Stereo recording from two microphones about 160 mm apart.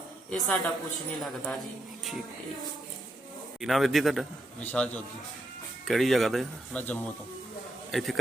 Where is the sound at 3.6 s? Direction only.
Centre (ahead or behind).